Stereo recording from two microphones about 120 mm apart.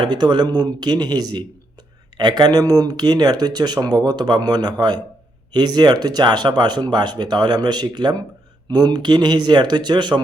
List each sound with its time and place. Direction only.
0.0 s speech: 40° right (ahead or behind)